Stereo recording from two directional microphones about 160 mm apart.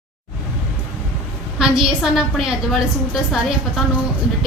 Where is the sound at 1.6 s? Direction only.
5° right (ahead or behind).